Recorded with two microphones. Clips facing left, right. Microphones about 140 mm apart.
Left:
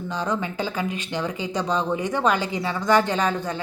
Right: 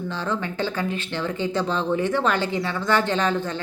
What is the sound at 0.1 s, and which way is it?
Speech, 15° left (ahead or behind).